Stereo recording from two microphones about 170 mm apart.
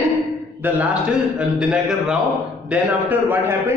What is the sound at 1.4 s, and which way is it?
A man's voice, 5° right (ahead or behind).